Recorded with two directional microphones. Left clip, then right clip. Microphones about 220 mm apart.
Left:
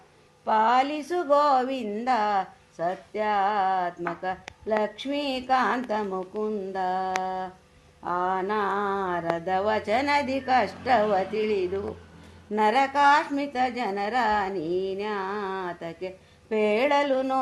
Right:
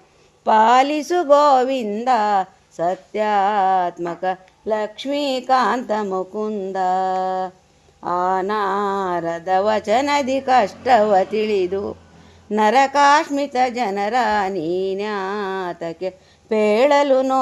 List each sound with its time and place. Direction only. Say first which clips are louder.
0.4 s speech: right 8 dB; 45° right (ahead or behind)
4.8 s a sound: right 6 dB; 40° right (ahead or behind)
8.0 s speech: right 7 dB; 45° right (ahead or behind)